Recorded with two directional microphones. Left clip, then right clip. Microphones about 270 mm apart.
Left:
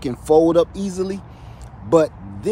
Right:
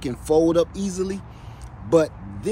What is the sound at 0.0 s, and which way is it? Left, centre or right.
Speech, centre.